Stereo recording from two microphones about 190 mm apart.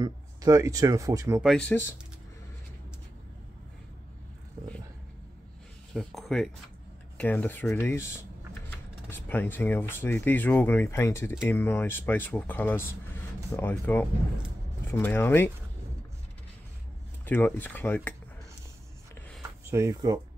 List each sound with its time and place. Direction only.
0.0 s speech: 20° right (ahead or behind)
1.4 s speech: 5° left (ahead or behind)
5.9 s speech: centre (ahead or behind)
17.3 s speech: 10° left (ahead or behind)
19.6 s speech: 15° right (ahead or behind)